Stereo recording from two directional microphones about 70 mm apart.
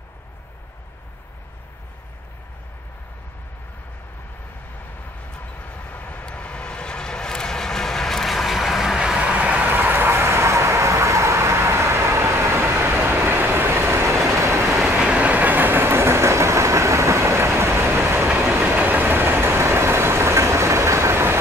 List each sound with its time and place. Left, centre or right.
5.3 s vehicle: centre; by 14.6 s right
15.0 s train: centre; by 18.3 s right
18.6 s vehicle: right